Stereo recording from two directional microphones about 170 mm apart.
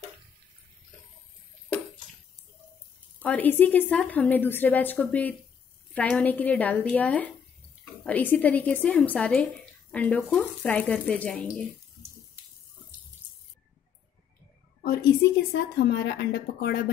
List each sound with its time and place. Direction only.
3.2 s a woman's voice: 10° left (ahead or behind)
14.8 s a sound: 65° left (ahead or behind)
15.5 s a woman's voice: 70° left (ahead or behind)